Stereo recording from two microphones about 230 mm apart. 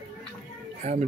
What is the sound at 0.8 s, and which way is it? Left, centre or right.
Speech, right.